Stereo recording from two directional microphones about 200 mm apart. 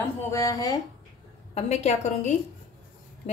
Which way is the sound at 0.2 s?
15° left (ahead or behind).